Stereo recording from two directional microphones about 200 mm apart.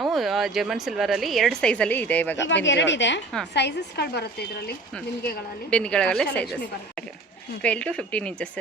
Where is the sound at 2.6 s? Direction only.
65° left (ahead or behind).